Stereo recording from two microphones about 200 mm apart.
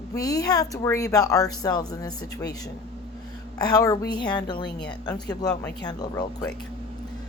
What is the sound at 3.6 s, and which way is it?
Speech, 20° left (ahead or behind).